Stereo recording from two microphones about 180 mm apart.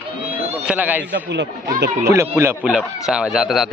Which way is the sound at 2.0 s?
15° right (ahead or behind).